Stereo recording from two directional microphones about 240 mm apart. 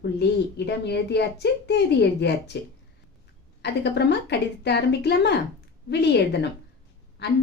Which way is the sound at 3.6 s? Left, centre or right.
Left.